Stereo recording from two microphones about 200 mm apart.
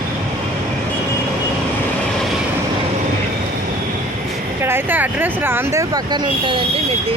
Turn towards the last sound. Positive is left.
turn(degrees=-25)  # may be behind; listen again after turning